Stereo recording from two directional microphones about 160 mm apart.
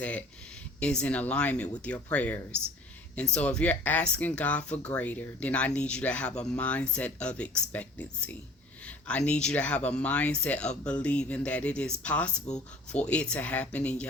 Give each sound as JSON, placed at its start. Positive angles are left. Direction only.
{"t": 0.0, "sound": "speech", "side_deg": 10}